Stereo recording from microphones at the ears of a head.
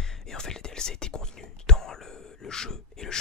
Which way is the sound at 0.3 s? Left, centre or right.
Left.